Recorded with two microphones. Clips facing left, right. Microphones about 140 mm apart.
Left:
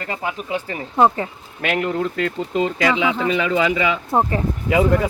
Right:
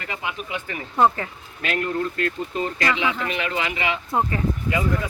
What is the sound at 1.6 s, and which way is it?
Speech, 80° left.